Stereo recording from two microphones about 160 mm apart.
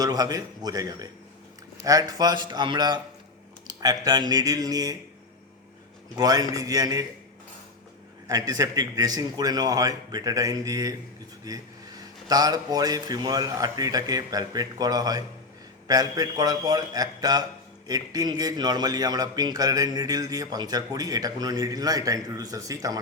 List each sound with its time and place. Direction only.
0.0 s a man's voice: 25° right (ahead or behind)
6.1 s a man's voice: 25° right (ahead or behind)
8.3 s a man's voice: 25° right (ahead or behind)